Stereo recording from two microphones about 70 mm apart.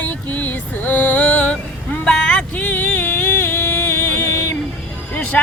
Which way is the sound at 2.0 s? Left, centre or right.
Centre.